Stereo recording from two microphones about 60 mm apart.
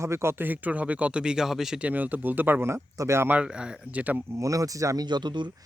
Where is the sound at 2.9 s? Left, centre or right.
Right.